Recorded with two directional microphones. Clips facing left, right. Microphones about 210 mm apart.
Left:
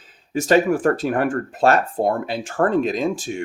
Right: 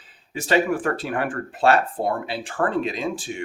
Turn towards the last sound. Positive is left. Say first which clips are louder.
# left 5 dB
turn(degrees=45)  # may be behind; listen again after turning